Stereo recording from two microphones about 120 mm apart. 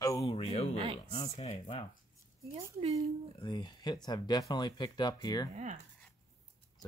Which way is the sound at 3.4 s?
40° left (ahead or behind).